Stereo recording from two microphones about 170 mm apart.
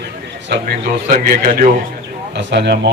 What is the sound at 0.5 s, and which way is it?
Speech, 75° right (ahead or behind).